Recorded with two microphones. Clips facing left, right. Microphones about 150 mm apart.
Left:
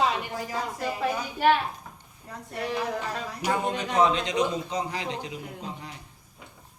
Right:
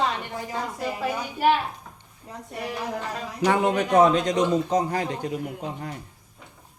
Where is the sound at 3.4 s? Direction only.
75° right (ahead or behind); by 5.9 s 50° right (ahead or behind).